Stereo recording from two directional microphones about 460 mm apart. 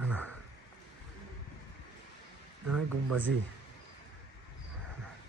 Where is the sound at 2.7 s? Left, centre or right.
Right.